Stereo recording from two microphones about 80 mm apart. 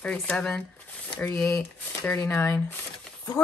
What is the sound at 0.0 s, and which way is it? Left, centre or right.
Speech, centre.